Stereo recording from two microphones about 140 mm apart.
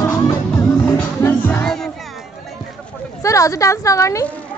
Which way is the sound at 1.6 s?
Centre (ahead or behind).